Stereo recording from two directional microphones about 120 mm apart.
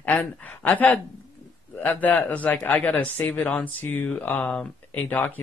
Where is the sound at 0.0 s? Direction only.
10° left (ahead or behind).